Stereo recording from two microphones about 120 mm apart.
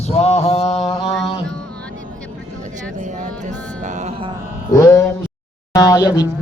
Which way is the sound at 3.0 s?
90° right.